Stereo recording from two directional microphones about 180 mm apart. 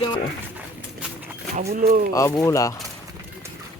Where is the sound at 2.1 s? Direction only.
20° left (ahead or behind).